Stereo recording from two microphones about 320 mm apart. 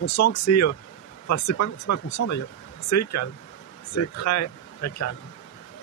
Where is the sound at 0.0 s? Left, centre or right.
Left.